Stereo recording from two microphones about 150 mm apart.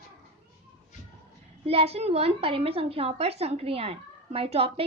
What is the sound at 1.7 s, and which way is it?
A woman's voice, 40° right (ahead or behind).